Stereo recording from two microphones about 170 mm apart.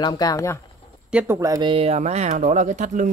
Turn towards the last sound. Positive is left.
turn(degrees=-45)  # may be behind; listen again after turning